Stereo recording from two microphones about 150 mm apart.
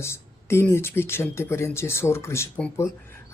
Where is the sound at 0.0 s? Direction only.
15° left (ahead or behind).